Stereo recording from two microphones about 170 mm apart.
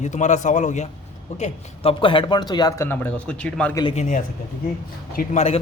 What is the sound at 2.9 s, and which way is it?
Speech, 10° left (ahead or behind).